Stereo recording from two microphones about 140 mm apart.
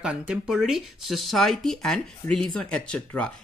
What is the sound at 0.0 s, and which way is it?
Speech, 5° right (ahead or behind).